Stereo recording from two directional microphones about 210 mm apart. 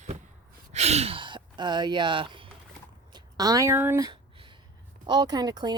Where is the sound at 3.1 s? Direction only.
20° right (ahead or behind).